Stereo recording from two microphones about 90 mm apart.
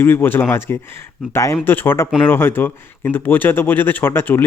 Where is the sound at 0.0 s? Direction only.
25° left (ahead or behind).